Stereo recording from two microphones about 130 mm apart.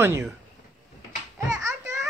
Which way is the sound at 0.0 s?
20° right (ahead or behind).